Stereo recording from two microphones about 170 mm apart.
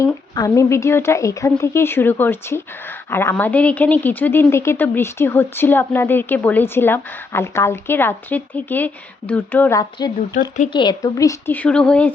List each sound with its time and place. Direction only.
0.0 s a woman's voice: 20° left (ahead or behind)